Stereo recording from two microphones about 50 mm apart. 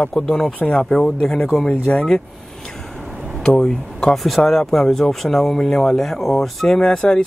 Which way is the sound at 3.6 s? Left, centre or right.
Centre.